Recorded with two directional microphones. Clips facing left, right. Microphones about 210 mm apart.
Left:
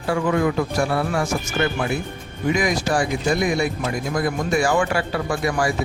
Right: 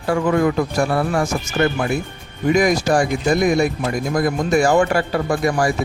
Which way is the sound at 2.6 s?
45° right (ahead or behind).